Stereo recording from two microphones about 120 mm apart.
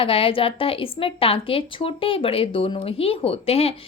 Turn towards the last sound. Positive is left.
turn(degrees=55)  # may be behind; listen again after turning